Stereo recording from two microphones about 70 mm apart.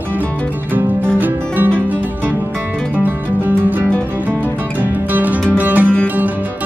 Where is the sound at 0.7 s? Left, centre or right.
Right.